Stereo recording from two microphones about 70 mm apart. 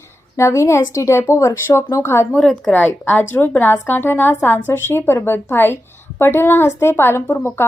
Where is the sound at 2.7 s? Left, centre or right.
Left.